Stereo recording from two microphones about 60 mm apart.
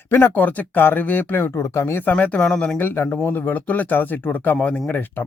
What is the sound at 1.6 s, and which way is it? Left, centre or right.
Speech, left.